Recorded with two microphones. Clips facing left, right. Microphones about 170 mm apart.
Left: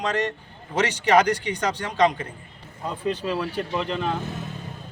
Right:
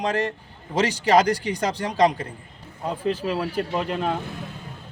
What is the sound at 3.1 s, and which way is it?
Speech, 5° right (ahead or behind).